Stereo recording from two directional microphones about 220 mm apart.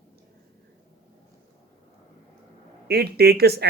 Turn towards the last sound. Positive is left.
turn(degrees=-45)  # may be behind; listen again after turning